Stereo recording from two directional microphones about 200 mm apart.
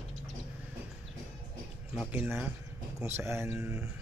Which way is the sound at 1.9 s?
10° right (ahead or behind).